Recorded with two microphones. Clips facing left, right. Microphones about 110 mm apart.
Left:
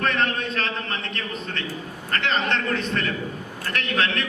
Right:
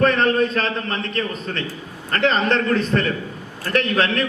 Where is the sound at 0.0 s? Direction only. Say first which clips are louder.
Right 7 dB; 35° right (ahead or behind).